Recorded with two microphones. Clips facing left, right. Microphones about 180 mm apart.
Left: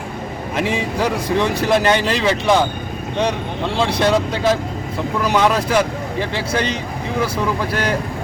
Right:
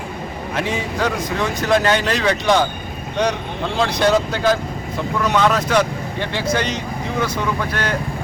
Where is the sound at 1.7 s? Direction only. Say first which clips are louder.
Right 2 dB; 5° left (ahead or behind).